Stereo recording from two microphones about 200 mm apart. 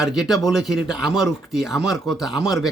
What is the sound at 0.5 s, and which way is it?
Speech, centre (ahead or behind).